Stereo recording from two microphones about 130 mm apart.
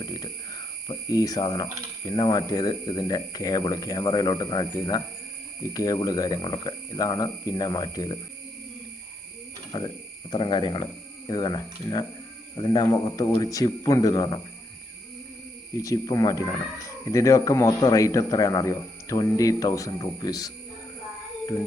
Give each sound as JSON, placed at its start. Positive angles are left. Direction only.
{"t": 0.0, "sound": "cricket", "side_deg": 30}
{"t": 2.0, "sound": "speech", "side_deg": 30}
{"t": 9.7, "sound": "speech", "side_deg": 35}
{"t": 15.8, "sound": "speech", "side_deg": 25}